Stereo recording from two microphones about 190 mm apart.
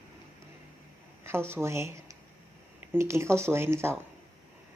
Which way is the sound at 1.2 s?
15° right (ahead or behind).